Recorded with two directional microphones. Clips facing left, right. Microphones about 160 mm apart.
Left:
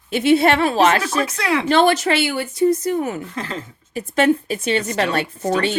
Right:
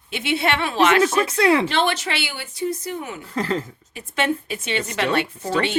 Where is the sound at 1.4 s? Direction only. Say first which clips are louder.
Right 6 dB; 30° right (ahead or behind).